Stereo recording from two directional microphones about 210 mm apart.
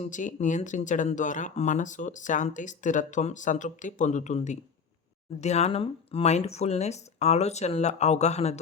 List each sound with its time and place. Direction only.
0.0 s speech: 35° left (ahead or behind)